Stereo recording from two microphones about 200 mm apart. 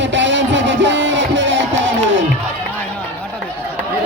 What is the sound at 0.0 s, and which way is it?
Music, 65° right (ahead or behind).